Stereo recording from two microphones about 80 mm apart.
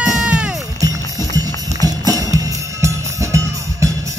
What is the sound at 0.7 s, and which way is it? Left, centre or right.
Music, right.